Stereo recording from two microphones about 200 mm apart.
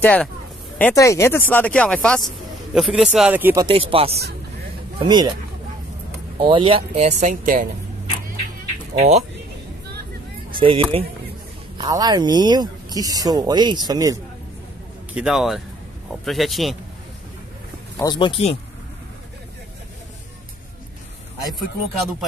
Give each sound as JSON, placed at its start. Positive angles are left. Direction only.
{"t": 0.0, "sound": "speech", "side_deg": 5}
{"t": 3.6, "sound": "speech", "side_deg": -30}
{"t": 6.4, "sound": "speech", "side_deg": -25}
{"t": 8.9, "sound": "speech", "side_deg": -35}
{"t": 10.5, "sound": "speech", "side_deg": -25}
{"t": 15.1, "sound": "speech", "side_deg": 0}
{"t": 17.9, "sound": "speech", "side_deg": 20}